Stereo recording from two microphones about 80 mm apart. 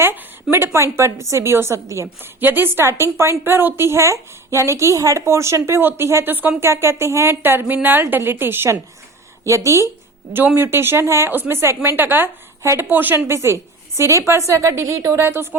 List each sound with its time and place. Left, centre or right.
0.0 s a sound: right
0.5 s speech: right
2.4 s a woman's voice: right
9.4 s speech: right